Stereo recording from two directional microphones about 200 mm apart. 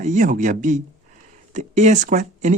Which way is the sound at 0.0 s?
40° right (ahead or behind).